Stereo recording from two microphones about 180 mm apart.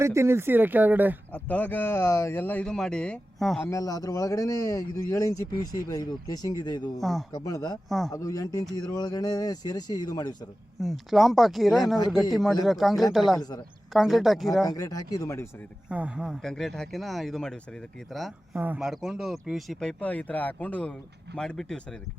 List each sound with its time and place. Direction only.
0.0 s speech: 15° right (ahead or behind)
1.3 s speech: 10° left (ahead or behind)
3.7 s speech: 20° left (ahead or behind)
7.0 s speech: centre (ahead or behind)
7.4 s speech: 20° left (ahead or behind)
7.9 s speech: centre (ahead or behind)
8.1 s speech: 20° left (ahead or behind)
10.8 s speech: centre (ahead or behind)
14.7 s speech: 20° left (ahead or behind)
15.9 s speech: 5° right (ahead or behind)
18.5 s speech: 10° right (ahead or behind)